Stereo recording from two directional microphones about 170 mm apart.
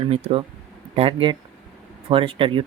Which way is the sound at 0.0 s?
35° right (ahead or behind).